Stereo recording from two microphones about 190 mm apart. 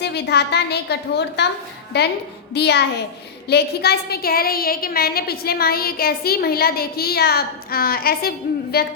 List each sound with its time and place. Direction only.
0.0 s a woman's voice: 60° left (ahead or behind)